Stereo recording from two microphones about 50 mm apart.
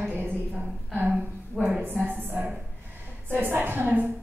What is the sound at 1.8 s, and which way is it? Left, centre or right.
A woman's voice, right.